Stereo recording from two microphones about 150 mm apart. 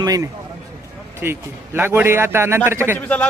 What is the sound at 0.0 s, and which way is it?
Speech, 25° right (ahead or behind).